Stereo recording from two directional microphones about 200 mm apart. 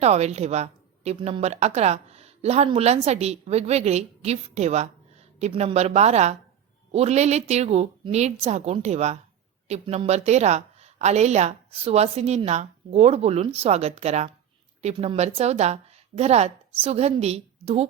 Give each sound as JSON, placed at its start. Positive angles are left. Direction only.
{"t": 0.0, "sound": "a woman's voice", "side_deg": -35}